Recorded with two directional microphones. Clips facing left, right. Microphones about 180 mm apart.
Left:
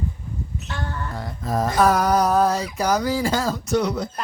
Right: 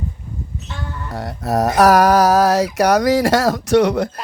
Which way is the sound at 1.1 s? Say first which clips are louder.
Right 7 dB; 75° right (ahead or behind).